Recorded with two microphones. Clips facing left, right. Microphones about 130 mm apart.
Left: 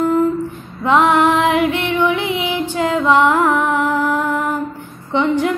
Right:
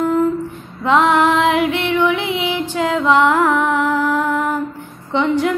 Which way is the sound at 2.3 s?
Centre (ahead or behind).